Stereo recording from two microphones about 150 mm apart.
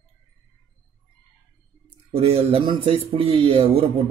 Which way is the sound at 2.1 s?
40° right (ahead or behind).